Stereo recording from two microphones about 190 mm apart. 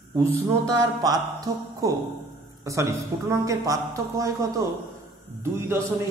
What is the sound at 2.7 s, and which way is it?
Speech, 15° right (ahead or behind).